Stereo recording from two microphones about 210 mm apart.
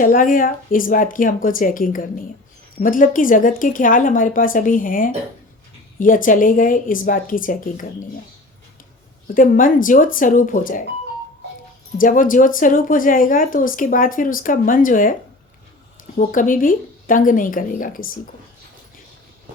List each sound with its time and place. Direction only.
0.0 s speech: 40° left (ahead or behind)
9.2 s speech: 40° left (ahead or behind)
11.9 s speech: 40° left (ahead or behind)
16.1 s speech: 40° left (ahead or behind)